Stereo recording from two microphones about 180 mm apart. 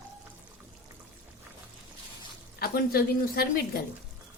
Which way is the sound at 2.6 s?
60° left (ahead or behind).